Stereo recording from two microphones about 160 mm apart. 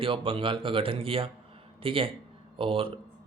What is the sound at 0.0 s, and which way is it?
Speech, 35° right (ahead or behind).